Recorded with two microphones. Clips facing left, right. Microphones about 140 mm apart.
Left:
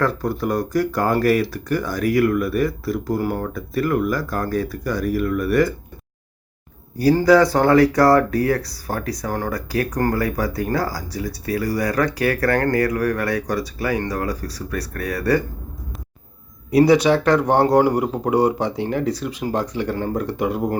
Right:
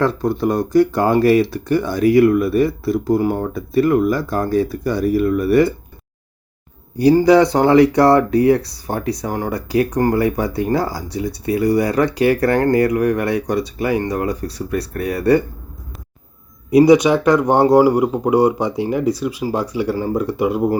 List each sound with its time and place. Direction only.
0.0 s speech: 25° right (ahead or behind)
7.0 s speech: 20° right (ahead or behind)
16.7 s speech: 15° right (ahead or behind)